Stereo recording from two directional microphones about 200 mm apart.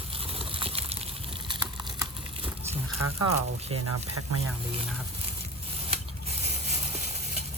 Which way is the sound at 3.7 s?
90° right.